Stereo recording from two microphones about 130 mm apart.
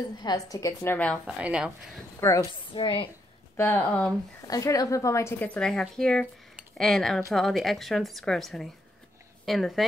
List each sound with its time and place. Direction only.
0.2 s a woman's voice: 30° left (ahead or behind)
0.9 s speech: 5° left (ahead or behind)
1.2 s speech: 10° right (ahead or behind)
2.1 s a woman's voice: 20° left (ahead or behind)
2.7 s a woman's voice: 40° left (ahead or behind)
3.5 s speech: 15° left (ahead or behind)
4.5 s a woman's voice: 25° left (ahead or behind)
5.5 s a woman's voice: 5° left (ahead or behind)